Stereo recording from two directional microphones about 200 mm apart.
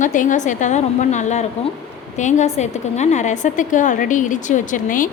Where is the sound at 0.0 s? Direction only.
40° left (ahead or behind).